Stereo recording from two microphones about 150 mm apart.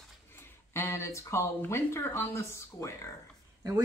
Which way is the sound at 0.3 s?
15° left (ahead or behind).